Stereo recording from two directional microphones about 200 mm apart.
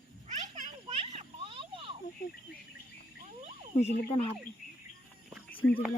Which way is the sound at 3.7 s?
35° left (ahead or behind).